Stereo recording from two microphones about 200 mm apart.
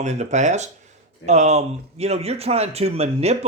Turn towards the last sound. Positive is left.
turn(degrees=-30)  # may be behind; listen again after turning